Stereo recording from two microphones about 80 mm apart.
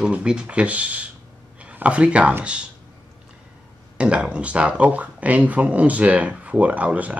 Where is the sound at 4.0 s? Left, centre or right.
Centre.